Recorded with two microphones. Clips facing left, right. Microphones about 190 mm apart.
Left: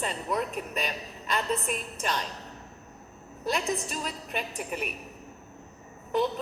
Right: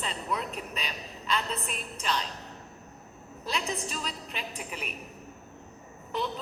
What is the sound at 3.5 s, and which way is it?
A woman's voice, 45° left (ahead or behind).